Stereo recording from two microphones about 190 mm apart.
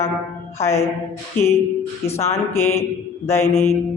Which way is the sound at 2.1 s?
15° left (ahead or behind).